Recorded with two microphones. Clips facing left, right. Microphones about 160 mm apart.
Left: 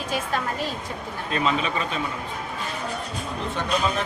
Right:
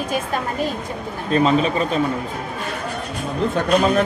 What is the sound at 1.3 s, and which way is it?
Speech, 35° right (ahead or behind).